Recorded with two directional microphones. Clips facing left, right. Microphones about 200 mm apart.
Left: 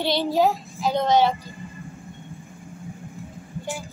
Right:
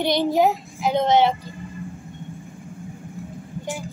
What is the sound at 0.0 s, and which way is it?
A woman's voice, 20° right (ahead or behind).